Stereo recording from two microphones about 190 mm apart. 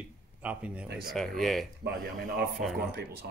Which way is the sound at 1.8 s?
55° right (ahead or behind).